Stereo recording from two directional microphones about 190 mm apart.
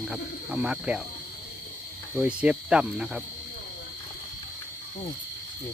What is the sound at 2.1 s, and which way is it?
Speech, 5° right (ahead or behind).